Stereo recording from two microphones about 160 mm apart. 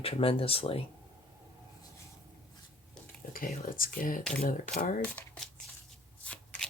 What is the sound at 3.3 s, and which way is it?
Speech, 60° left (ahead or behind).